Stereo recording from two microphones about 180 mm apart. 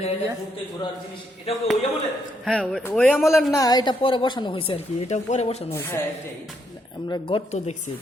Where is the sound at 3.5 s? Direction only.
20° left (ahead or behind); by 5.6 s 35° left (ahead or behind).